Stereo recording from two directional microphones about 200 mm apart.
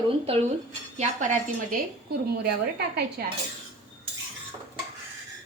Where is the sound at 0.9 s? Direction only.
35° right (ahead or behind).